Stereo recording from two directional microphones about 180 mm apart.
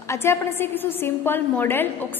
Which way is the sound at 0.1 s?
15° left (ahead or behind).